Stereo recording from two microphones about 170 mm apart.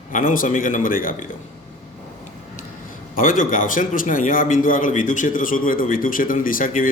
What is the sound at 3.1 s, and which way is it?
A man's voice, 55° left (ahead or behind).